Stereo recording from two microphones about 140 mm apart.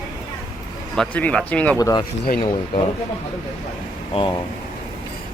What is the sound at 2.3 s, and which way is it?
Speech, 85° left.